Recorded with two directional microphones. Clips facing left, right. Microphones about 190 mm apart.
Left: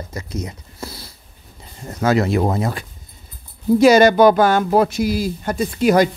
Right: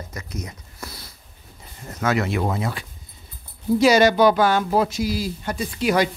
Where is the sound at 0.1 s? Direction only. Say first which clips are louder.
Left 6 dB; 30° left (ahead or behind).